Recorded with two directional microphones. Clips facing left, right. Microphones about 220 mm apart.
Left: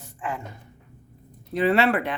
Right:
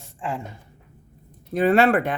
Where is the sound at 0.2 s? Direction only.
25° right (ahead or behind).